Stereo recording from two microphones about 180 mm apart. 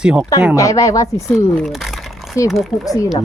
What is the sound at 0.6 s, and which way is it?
Speech, 20° left (ahead or behind).